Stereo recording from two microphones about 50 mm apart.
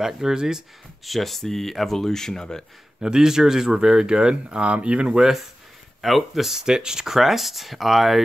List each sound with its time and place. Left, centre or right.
0.0 s speech: centre
1.0 s speech: centre
3.0 s speech: centre
5.9 s speech: centre